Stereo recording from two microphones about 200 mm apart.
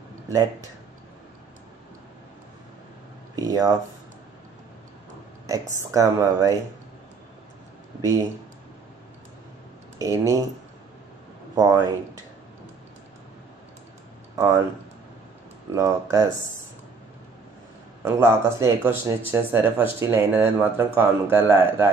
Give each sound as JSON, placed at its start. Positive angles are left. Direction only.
{"t": 0.3, "sound": "speech", "side_deg": -15}
{"t": 3.3, "sound": "speech", "side_deg": -15}
{"t": 5.5, "sound": "speech", "side_deg": -15}
{"t": 9.9, "sound": "speech", "side_deg": -15}
{"t": 11.5, "sound": "speech", "side_deg": -15}
{"t": 15.7, "sound": "speech", "side_deg": -15}
{"t": 18.0, "sound": "speech", "side_deg": -15}